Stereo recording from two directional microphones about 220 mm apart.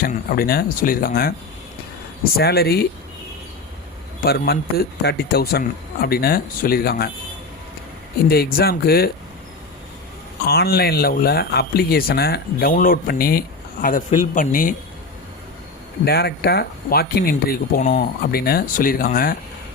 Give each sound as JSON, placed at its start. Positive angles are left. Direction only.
{"t": 0.0, "sound": "speech", "side_deg": 40}
{"t": 2.4, "sound": "speech", "side_deg": 45}
{"t": 4.2, "sound": "speech", "side_deg": 45}
{"t": 8.3, "sound": "speech", "side_deg": 45}
{"t": 10.4, "sound": "speech", "side_deg": 45}
{"t": 16.0, "sound": "speech", "side_deg": 45}